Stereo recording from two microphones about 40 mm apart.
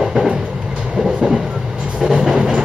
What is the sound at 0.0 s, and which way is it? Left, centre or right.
Train, centre.